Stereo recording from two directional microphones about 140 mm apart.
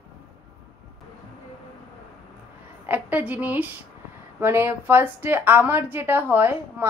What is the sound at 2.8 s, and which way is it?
A woman's voice, 10° right (ahead or behind).